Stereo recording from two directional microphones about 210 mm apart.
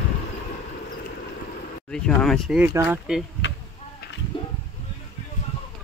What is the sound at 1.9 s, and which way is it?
Speech, 5° left (ahead or behind).